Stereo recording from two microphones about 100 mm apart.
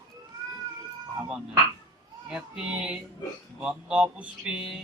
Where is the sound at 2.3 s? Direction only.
10° right (ahead or behind).